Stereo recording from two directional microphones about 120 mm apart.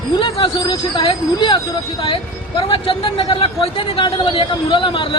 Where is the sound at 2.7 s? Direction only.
45° left (ahead or behind).